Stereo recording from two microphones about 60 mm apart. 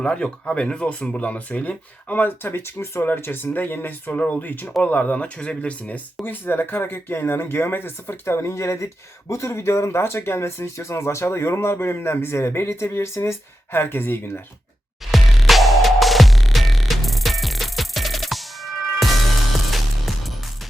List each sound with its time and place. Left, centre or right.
0.0 s speech: centre
6.2 s speech: left
15.1 s music: centre